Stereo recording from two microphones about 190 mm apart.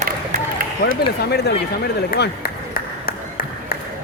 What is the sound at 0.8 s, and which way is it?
Speech, 55° left (ahead or behind).